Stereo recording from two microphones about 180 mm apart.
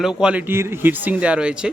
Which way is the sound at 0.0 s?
5° right (ahead or behind).